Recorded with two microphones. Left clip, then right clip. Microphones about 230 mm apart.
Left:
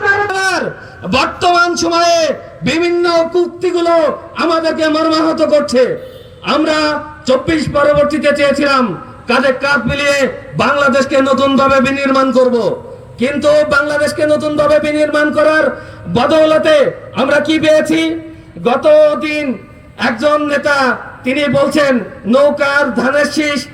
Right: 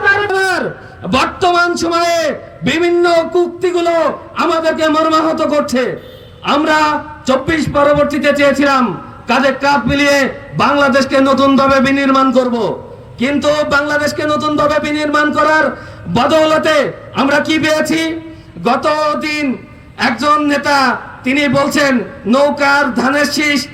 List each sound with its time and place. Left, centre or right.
0.3 s a sound: centre
1.1 s a man's voice: centre
9.2 s a man's voice: right
16.1 s a man's voice: centre
18.6 s a man's voice: right